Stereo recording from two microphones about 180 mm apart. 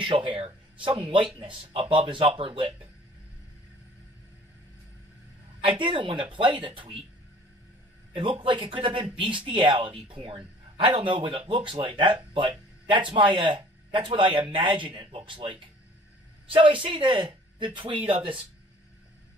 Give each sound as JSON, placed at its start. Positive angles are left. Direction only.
{"t": 0.0, "sound": "speech", "side_deg": -30}
{"t": 5.6, "sound": "speech", "side_deg": -30}
{"t": 8.1, "sound": "speech", "side_deg": -30}